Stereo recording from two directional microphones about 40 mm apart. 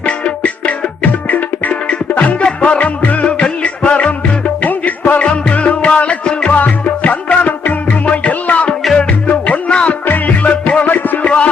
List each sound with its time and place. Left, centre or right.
0.0 s music: left
1.7 s music: left
3.2 s music: left
4.6 s music: left
7.4 s music: left
10.5 s music: left
10.8 s music: left